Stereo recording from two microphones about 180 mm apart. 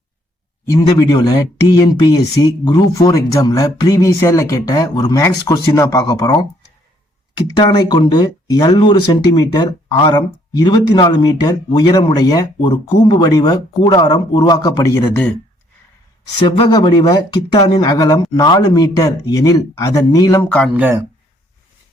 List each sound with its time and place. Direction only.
0.7 s speech: 20° left (ahead or behind)
16.5 s speech: 25° left (ahead or behind)
20.5 s speech: 5° left (ahead or behind)
20.7 s speech: 10° right (ahead or behind)